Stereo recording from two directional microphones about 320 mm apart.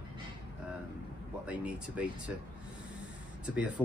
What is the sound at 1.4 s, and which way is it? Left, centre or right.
Speech, centre.